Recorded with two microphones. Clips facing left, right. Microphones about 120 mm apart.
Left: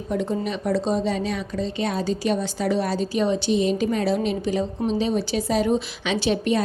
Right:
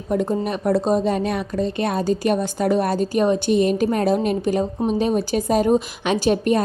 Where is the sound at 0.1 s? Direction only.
50° right (ahead or behind).